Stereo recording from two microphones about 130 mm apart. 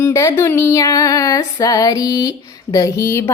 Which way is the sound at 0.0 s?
20° left (ahead or behind).